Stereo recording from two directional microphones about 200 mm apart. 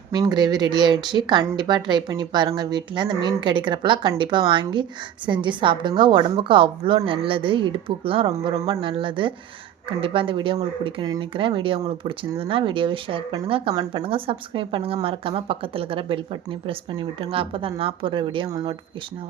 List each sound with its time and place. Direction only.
0.1 s speech: 20° right (ahead or behind)